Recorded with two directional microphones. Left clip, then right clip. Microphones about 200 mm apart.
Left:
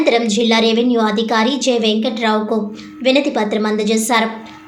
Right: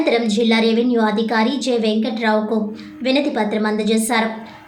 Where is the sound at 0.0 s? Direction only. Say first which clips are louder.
Left 3 dB; 5° left (ahead or behind).